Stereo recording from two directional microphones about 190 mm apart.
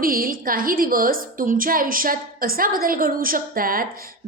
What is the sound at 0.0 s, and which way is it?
A woman's voice, 50° right (ahead or behind).